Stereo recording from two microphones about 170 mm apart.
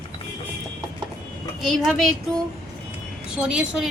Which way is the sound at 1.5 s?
Centre (ahead or behind).